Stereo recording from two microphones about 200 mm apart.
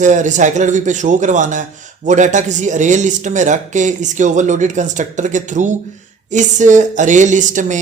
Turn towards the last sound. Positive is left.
turn(degrees=-40)  # may be behind; listen again after turning